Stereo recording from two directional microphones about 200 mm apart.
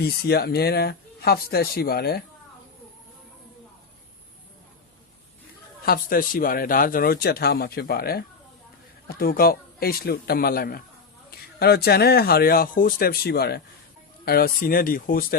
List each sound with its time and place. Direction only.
0.0 s speech: 50° left (ahead or behind)
5.8 s speech: 50° left (ahead or behind)